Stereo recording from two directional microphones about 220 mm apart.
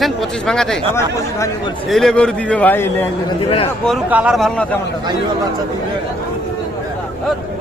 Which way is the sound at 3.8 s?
5° right (ahead or behind).